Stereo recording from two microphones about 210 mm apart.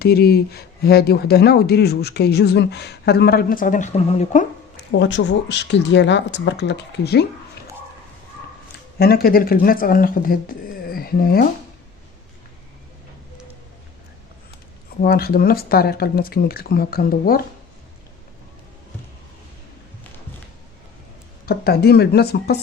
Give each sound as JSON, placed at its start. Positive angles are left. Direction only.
{"t": 0.0, "sound": "speech", "side_deg": 50}
{"t": 4.9, "sound": "speech", "side_deg": 60}
{"t": 9.0, "sound": "speech", "side_deg": 45}
{"t": 15.0, "sound": "speech", "side_deg": 45}
{"t": 21.4, "sound": "speech", "side_deg": 50}